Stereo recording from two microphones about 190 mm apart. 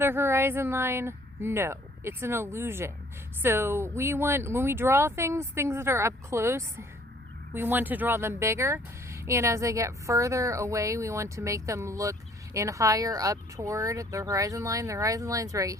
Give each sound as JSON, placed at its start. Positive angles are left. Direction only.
{"t": 0.0, "sound": "speech", "side_deg": -10}